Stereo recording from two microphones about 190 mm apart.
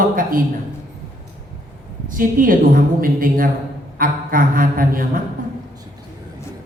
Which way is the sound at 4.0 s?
45° right (ahead or behind).